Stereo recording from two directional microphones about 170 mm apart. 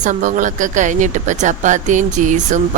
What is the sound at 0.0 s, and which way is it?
Speech, 45° right (ahead or behind).